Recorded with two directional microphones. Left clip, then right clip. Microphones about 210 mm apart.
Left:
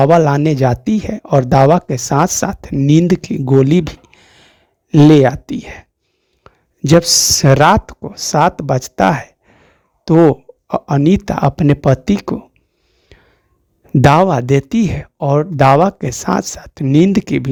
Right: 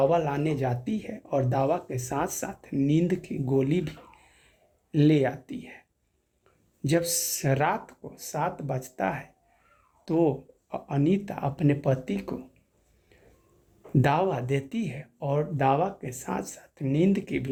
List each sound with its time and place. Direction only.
0.0 s speech: 50° left (ahead or behind)
14.0 s speech: 50° left (ahead or behind)